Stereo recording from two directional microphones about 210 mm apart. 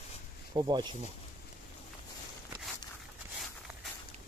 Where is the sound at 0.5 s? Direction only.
20° right (ahead or behind).